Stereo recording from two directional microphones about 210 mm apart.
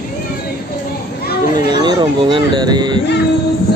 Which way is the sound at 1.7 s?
20° right (ahead or behind).